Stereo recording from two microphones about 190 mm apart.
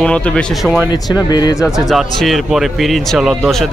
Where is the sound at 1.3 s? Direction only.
20° left (ahead or behind).